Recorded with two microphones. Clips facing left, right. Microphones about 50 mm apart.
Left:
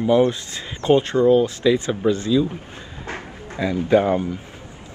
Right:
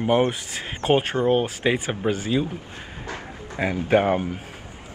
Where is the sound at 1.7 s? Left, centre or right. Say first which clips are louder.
Left 5 dB; right.